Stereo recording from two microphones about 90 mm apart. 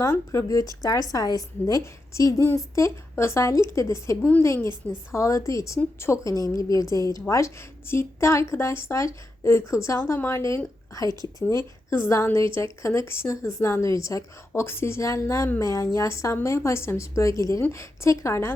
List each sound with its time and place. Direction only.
0.1 s speech: 30° left (ahead or behind)
0.4 s a woman's voice: 40° left (ahead or behind)
11.9 s a woman's voice: 35° left (ahead or behind)